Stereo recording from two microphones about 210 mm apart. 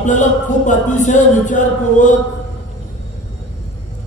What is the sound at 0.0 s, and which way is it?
Music, 35° left (ahead or behind).